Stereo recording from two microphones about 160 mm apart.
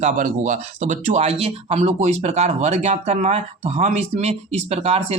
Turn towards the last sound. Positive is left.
turn(degrees=-40)  # may be behind; listen again after turning